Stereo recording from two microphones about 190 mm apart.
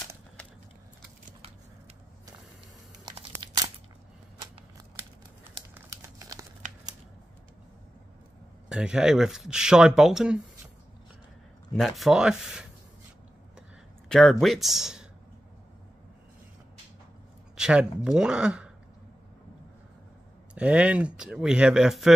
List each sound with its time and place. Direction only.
3.1 s crumpling: 20° right (ahead or behind)
5.8 s crumpling: 15° right (ahead or behind)
8.6 s speech: 5° right (ahead or behind)
12.0 s speech: 5° right (ahead or behind)
13.6 s a sound: centre (ahead or behind)
14.4 s speech: centre (ahead or behind)
17.6 s speech: 5° right (ahead or behind)
20.5 s speech: 5° right (ahead or behind)